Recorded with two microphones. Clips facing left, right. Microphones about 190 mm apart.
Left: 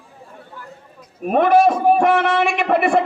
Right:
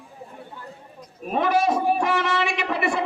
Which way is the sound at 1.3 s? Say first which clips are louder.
Left 7 dB; 55° left (ahead or behind).